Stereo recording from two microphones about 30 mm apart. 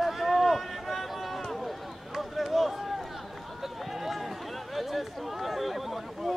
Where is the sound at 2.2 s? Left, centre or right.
Centre.